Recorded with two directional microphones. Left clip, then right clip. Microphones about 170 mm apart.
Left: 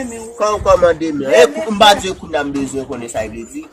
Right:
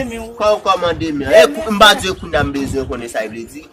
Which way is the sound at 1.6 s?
15° right (ahead or behind).